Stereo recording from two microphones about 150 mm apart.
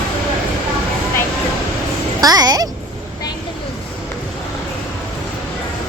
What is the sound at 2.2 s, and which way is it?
Speech, 25° right (ahead or behind).